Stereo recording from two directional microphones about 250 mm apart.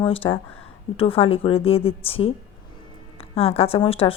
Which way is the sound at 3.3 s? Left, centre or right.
Left.